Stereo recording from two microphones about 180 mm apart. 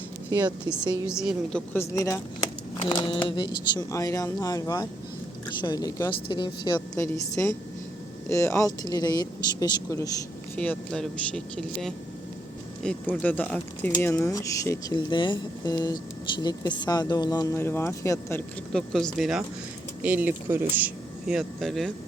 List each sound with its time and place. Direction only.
0.3 s speech: 25° right (ahead or behind)
1.0 s speech: 5° right (ahead or behind)
1.7 s a woman's voice: 15° left (ahead or behind)
10.5 s speech: 10° left (ahead or behind)